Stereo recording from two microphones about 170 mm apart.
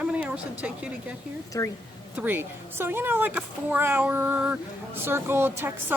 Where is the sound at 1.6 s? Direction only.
20° left (ahead or behind).